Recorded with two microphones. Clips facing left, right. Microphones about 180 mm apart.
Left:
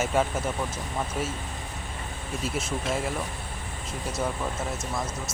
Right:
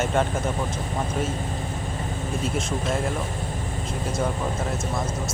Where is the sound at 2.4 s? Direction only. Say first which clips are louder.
Right 2 dB; 5° left (ahead or behind).